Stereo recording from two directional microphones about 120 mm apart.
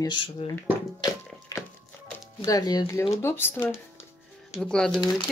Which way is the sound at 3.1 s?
20° left (ahead or behind).